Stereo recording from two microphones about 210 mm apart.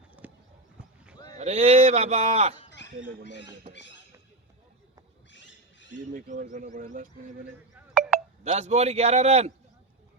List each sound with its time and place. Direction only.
0.2 s horse: 5° right (ahead or behind)
1.3 s speech: 30° right (ahead or behind)
3.2 s speech: 55° left (ahead or behind)
5.3 s wild animals: 60° left (ahead or behind)
6.1 s speech: 40° right (ahead or behind)
8.4 s speech: 30° right (ahead or behind)